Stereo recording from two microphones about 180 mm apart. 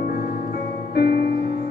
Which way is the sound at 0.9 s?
60° left (ahead or behind).